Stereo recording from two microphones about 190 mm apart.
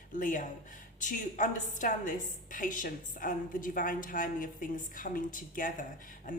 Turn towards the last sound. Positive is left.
turn(degrees=45)  # may be behind; listen again after turning